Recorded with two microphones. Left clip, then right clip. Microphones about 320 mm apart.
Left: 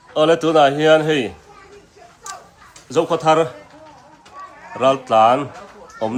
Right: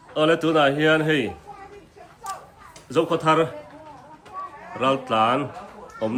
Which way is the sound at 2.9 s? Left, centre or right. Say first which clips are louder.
Left 4 dB; centre.